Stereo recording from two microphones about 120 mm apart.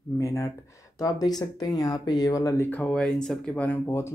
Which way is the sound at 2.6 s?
10° left (ahead or behind).